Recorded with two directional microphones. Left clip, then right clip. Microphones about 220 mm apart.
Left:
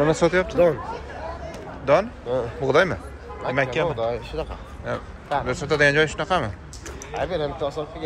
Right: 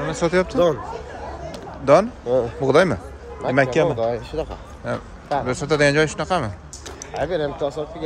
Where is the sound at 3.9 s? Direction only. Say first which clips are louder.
Right 3 dB; 55° right (ahead or behind).